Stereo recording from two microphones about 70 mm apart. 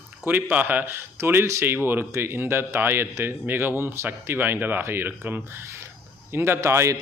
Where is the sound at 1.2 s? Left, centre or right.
Right.